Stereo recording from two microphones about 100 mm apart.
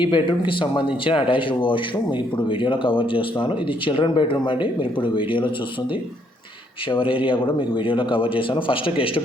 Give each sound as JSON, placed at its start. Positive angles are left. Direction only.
{"t": 0.0, "sound": "speech", "side_deg": 55}
{"t": 6.9, "sound": "speech", "side_deg": 60}